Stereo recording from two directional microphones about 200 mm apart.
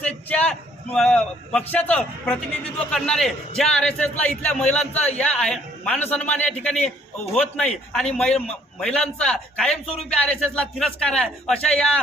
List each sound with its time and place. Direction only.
0.0 s a man's voice: 5° left (ahead or behind)
8.3 s a man's voice: 30° left (ahead or behind)
8.8 s a man's voice: 5° left (ahead or behind)
9.8 s a man's voice: 30° left (ahead or behind)
10.2 s a man's voice: 5° left (ahead or behind)